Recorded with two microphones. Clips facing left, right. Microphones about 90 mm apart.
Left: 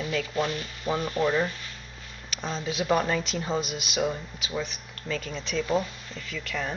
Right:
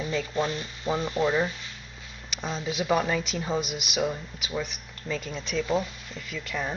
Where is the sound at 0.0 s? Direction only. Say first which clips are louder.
Even; 20° right (ahead or behind); by 6.2 s centre (ahead or behind).